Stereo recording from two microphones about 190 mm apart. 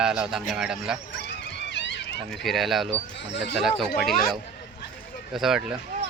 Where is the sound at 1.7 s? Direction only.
70° left (ahead or behind).